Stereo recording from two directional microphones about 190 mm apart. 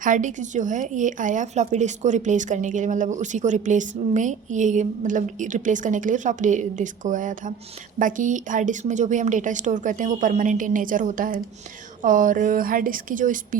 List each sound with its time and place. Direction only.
0.0 s speech: 45° right (ahead or behind)